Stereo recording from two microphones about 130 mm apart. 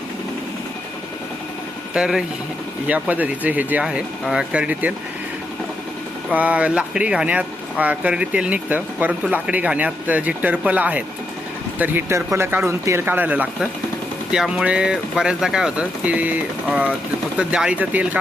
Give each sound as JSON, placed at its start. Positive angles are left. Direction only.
{"t": 1.9, "sound": "speech", "side_deg": -5}
{"t": 6.3, "sound": "speech", "side_deg": -10}